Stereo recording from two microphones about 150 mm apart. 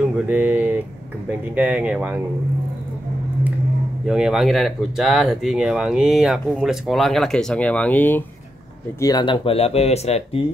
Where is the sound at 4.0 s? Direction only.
5° right (ahead or behind); by 8.3 s 15° left (ahead or behind).